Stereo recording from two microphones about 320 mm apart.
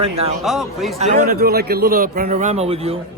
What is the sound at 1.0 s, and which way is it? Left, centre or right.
A man's voice, right.